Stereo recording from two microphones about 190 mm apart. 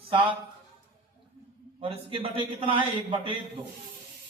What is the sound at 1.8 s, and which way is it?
A man's voice, 30° right (ahead or behind).